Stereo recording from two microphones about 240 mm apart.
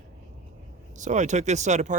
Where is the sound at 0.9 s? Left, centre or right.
Right.